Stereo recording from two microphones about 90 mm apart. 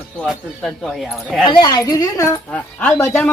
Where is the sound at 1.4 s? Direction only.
60° left (ahead or behind).